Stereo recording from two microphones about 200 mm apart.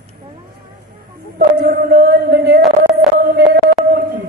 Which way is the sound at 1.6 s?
45° right (ahead or behind).